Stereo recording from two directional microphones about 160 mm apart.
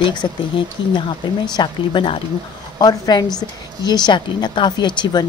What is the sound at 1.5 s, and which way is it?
Speech, 30° left (ahead or behind).